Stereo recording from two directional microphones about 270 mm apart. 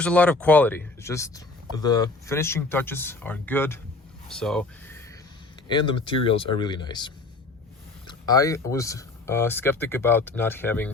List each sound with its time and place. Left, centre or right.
0.0 s speech: centre
5.6 s speech: centre